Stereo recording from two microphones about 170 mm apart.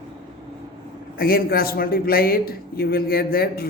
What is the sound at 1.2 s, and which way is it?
A man's voice, 60° left (ahead or behind).